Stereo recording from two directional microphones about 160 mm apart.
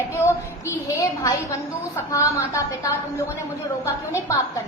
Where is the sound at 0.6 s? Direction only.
20° left (ahead or behind).